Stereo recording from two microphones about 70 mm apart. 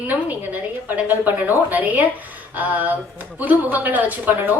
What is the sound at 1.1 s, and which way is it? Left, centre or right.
A woman's voice, right.